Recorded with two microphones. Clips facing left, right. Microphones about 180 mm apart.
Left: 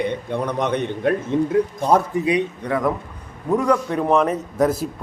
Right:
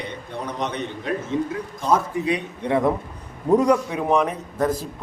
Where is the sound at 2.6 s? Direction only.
25° right (ahead or behind).